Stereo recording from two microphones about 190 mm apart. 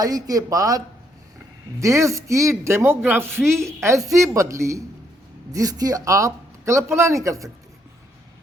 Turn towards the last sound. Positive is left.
turn(degrees=-15)  # may be behind; listen again after turning